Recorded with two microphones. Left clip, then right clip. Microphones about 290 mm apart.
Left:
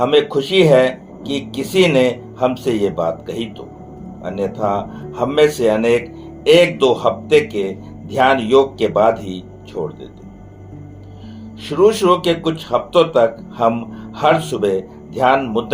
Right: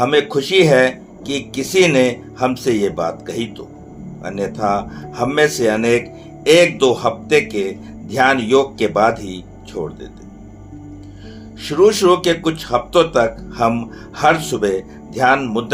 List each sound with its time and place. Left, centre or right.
0.0 s speech: right
11.6 s speech: right